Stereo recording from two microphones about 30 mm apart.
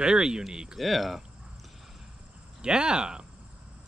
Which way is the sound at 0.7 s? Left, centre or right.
Centre.